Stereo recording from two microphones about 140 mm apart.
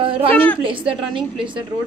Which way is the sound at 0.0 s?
40° right (ahead or behind).